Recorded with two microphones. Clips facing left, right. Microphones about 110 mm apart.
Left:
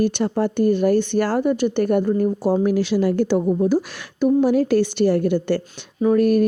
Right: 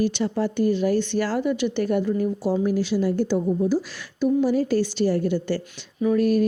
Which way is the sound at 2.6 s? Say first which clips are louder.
Left 4 dB; 75° left (ahead or behind).